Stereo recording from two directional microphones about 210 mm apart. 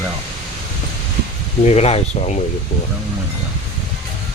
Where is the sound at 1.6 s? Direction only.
30° left (ahead or behind).